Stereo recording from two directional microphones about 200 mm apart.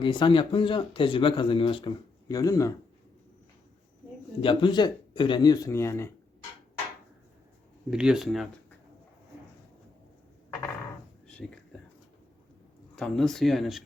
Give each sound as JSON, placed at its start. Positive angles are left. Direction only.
{"t": 0.0, "sound": "speech", "side_deg": 25}
{"t": 4.4, "sound": "speech", "side_deg": 25}
{"t": 7.9, "sound": "speech", "side_deg": -5}
{"t": 11.3, "sound": "speech", "side_deg": 5}
{"t": 13.0, "sound": "speech", "side_deg": 0}